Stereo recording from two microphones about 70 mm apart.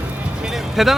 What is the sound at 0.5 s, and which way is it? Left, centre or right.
Music, centre.